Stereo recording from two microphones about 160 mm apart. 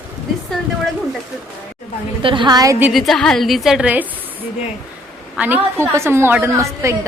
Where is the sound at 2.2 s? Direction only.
30° right (ahead or behind).